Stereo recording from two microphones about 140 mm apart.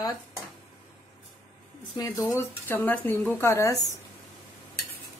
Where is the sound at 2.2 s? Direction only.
15° left (ahead or behind).